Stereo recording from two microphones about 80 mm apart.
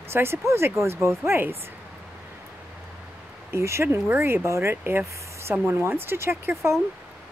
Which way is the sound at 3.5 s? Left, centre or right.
Right.